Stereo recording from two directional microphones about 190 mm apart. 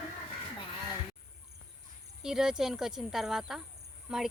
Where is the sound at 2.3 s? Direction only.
5° right (ahead or behind).